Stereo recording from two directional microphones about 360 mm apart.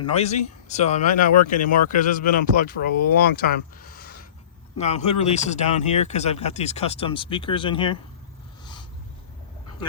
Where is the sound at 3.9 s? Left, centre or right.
Left.